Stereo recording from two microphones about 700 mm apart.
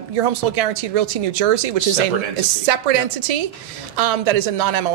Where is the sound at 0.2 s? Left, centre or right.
Right.